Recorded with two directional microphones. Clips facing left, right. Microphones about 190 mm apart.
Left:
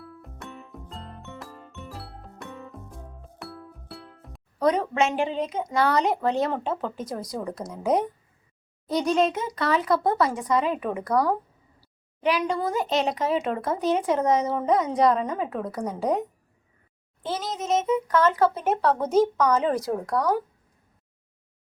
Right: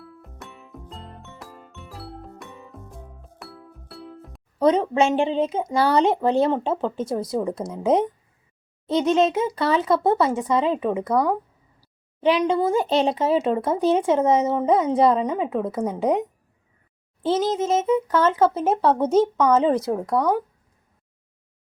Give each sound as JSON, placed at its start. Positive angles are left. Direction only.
{"t": 0.0, "sound": "music", "side_deg": 0}
{"t": 4.6, "sound": "speech", "side_deg": -25}
{"t": 17.2, "sound": "speech", "side_deg": -25}